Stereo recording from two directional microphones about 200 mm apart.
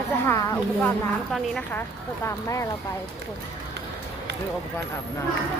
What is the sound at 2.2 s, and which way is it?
Speech, 15° left (ahead or behind).